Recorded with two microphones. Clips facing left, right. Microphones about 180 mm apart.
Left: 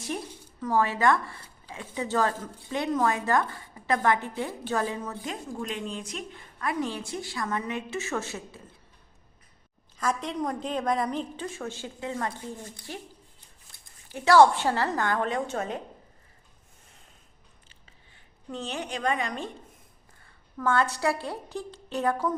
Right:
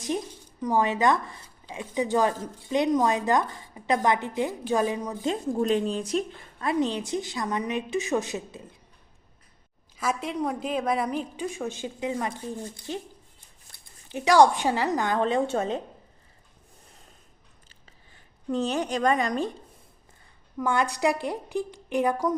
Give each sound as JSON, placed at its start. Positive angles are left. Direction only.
{"t": 0.6, "sound": "speech", "side_deg": -15}
{"t": 5.3, "sound": "speech", "side_deg": -35}
{"t": 6.6, "sound": "a woman's voice", "side_deg": -20}
{"t": 10.0, "sound": "speech", "side_deg": -5}
{"t": 14.1, "sound": "speech", "side_deg": -15}
{"t": 18.5, "sound": "speech", "side_deg": -40}
{"t": 20.6, "sound": "speech", "side_deg": -15}